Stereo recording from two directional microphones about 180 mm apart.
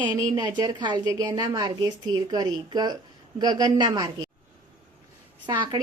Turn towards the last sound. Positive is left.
turn(degrees=-20)  # may be behind; listen again after turning